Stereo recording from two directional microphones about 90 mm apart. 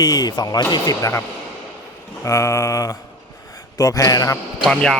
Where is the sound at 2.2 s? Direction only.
35° left (ahead or behind).